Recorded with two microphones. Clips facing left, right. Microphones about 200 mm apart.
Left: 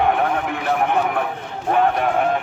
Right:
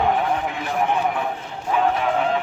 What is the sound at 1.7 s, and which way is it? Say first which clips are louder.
Speech: left 3 dB; 55° left (ahead or behind).